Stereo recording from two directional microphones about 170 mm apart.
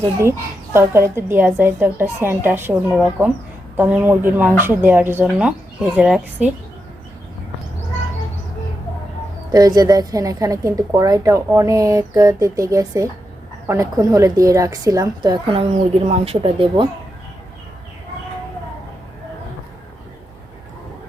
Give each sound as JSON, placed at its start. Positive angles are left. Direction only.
{"t": 0.2, "sound": "a woman's voice", "side_deg": -15}
{"t": 9.5, "sound": "a woman's voice", "side_deg": -20}